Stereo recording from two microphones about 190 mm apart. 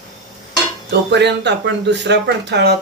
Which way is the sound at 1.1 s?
65° right (ahead or behind).